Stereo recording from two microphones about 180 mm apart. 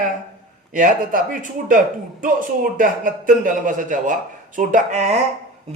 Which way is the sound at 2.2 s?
50° right (ahead or behind).